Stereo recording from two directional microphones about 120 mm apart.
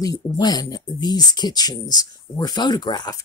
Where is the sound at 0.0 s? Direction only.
30° left (ahead or behind).